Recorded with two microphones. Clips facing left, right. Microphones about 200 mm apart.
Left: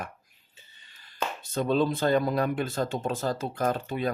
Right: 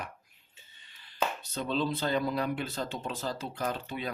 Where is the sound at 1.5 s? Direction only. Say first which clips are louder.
Left 9 dB; 50° left (ahead or behind).